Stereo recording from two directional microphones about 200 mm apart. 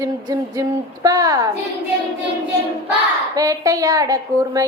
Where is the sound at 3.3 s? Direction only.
15° right (ahead or behind).